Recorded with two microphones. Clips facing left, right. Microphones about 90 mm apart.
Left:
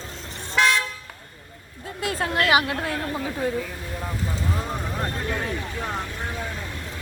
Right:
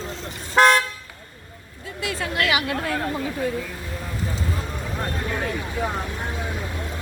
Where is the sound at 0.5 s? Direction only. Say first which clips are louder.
Right 5 dB; 50° right (ahead or behind).